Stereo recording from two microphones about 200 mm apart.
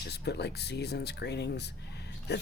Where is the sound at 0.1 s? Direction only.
55° left (ahead or behind).